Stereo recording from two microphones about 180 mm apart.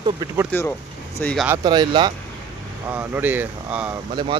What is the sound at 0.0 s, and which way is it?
Speech, 20° right (ahead or behind).